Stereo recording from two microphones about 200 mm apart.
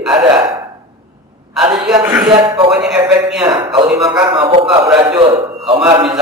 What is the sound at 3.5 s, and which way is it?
Speech, 25° right (ahead or behind).